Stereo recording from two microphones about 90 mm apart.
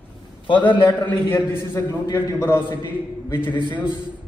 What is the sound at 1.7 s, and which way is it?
A man's voice, 30° left (ahead or behind).